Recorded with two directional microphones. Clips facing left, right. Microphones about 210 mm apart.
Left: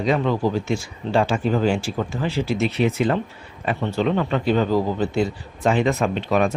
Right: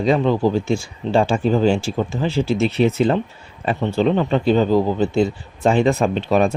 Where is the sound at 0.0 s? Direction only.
30° right (ahead or behind).